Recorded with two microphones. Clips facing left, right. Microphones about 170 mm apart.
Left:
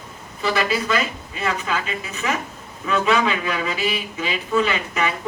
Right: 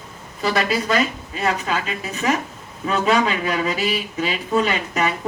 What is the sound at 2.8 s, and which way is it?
Speech, 40° right (ahead or behind).